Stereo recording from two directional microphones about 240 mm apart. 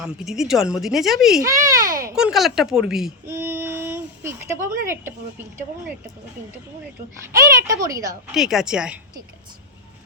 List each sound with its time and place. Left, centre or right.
0.0 s speech: centre
1.5 s a child's voice: centre
2.1 s speech: centre
2.9 s a sound: centre
4.5 s speech: right
7.9 s a child's voice: centre
8.3 s speech: centre